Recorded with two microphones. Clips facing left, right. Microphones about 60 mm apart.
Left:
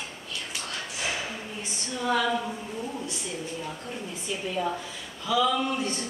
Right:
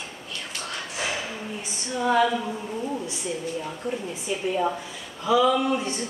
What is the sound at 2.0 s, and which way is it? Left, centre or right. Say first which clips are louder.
Speech: right 5 dB; centre.